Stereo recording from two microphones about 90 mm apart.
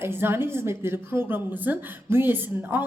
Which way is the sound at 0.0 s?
25° right (ahead or behind).